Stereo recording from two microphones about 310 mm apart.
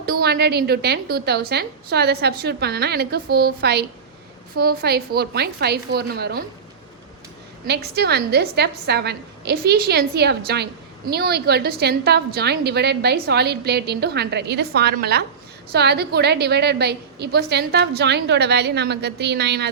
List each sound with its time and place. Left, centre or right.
0.0 s a woman's voice: right
7.7 s a woman's voice: right